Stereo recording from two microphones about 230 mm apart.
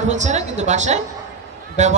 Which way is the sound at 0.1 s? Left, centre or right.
Right.